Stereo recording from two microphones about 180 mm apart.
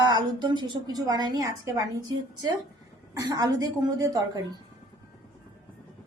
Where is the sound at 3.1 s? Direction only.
20° right (ahead or behind).